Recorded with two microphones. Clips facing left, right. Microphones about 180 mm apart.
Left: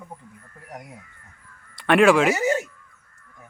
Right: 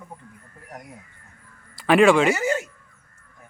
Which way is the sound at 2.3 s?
20° left (ahead or behind).